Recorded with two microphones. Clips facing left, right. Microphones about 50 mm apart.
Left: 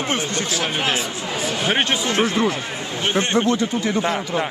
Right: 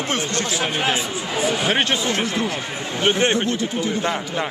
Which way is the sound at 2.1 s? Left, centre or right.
Left.